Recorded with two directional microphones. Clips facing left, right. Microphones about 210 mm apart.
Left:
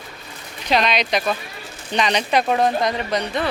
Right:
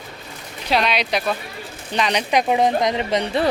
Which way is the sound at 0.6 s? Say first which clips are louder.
Left 1 dB; 5° right (ahead or behind).